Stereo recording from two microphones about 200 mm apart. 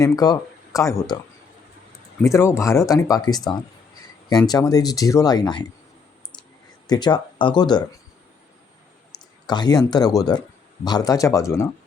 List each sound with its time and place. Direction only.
0.0 s speech: 20° left (ahead or behind)
2.2 s speech: 15° left (ahead or behind)
6.8 s speech: 20° left (ahead or behind)
9.5 s speech: 20° left (ahead or behind)